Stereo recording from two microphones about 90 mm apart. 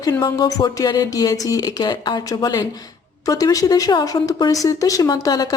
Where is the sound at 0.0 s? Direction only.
40° left (ahead or behind).